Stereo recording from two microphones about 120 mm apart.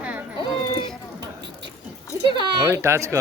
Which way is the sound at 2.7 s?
25° right (ahead or behind).